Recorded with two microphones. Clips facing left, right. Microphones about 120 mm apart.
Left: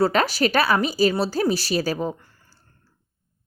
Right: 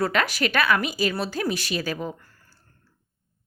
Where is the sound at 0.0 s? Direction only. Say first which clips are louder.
Left 4 dB; 35° left (ahead or behind).